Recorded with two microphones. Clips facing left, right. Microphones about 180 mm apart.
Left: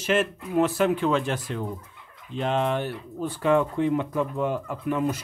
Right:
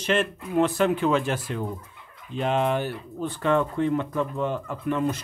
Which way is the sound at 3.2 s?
10° left (ahead or behind).